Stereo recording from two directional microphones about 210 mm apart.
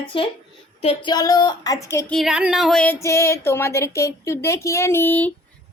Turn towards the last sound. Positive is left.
turn(degrees=10)  # may be behind; listen again after turning